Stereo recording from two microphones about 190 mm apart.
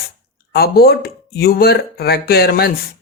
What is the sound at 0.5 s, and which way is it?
Speech, 55° left (ahead or behind).